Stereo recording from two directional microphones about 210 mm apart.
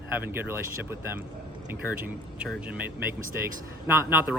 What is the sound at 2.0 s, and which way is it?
Speech, 5° right (ahead or behind).